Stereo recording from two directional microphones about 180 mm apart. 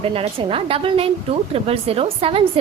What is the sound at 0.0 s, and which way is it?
Speech, 30° right (ahead or behind).